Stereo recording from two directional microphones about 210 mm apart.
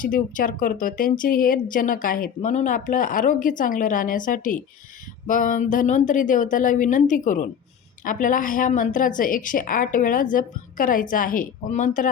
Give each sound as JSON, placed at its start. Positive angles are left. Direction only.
{"t": 0.0, "sound": "a woman's voice", "side_deg": 40}